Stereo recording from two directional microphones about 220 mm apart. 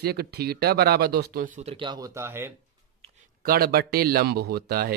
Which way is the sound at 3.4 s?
45° right (ahead or behind).